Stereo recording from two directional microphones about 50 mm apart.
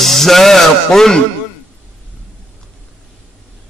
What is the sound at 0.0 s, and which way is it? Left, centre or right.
Speech, centre.